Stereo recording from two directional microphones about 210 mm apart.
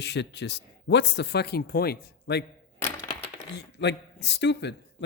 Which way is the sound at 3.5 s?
55° left (ahead or behind).